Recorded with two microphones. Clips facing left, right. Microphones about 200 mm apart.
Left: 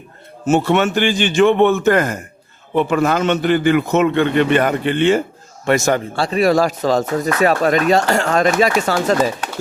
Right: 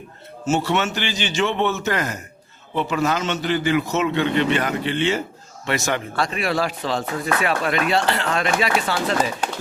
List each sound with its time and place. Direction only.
0.4 s speech: 55° left (ahead or behind)
6.1 s speech: 35° left (ahead or behind)